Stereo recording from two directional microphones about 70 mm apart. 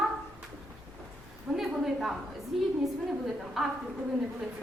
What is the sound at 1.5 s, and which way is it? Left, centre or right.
A woman's voice, centre.